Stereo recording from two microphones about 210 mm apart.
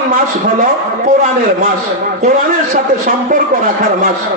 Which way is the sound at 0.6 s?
40° right (ahead or behind).